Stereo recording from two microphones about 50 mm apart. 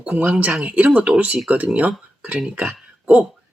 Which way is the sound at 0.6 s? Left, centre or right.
Right.